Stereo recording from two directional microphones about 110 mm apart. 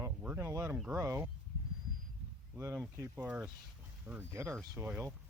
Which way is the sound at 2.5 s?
25° right (ahead or behind).